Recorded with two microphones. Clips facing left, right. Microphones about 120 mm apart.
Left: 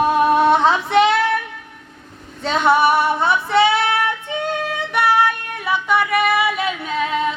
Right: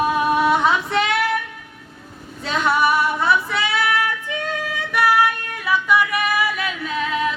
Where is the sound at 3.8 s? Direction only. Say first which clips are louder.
Left 2 dB; 25° left (ahead or behind).